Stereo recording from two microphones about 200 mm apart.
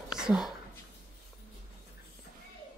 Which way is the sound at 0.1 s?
5° right (ahead or behind).